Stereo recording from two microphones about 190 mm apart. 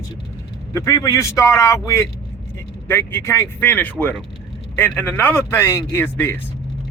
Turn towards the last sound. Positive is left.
turn(degrees=15)  # may be behind; listen again after turning